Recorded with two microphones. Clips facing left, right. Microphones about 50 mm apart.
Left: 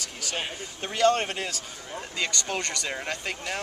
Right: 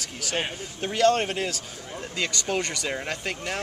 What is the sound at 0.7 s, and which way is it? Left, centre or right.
Speech, centre.